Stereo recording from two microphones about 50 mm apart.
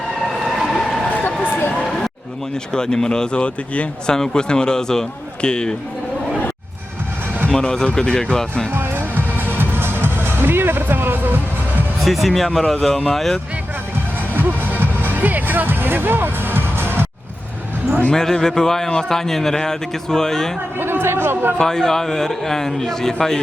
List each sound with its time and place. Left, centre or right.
0.4 s vehicle: centre
1.1 s a sound: left
2.7 s speech: centre
7.6 s speech: centre
8.7 s music: right
12.0 s speech: centre
14.3 s music: right
18.1 s speech: centre
20.7 s a man's voice: right
21.6 s speech: centre